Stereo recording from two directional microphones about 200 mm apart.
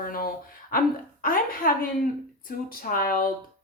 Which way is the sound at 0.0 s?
45° left (ahead or behind).